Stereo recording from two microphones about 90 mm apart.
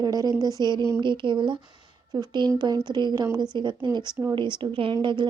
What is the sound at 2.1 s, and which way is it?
Speech, 50° right (ahead or behind).